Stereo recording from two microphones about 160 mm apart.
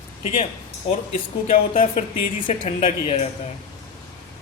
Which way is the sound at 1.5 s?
40° left (ahead or behind).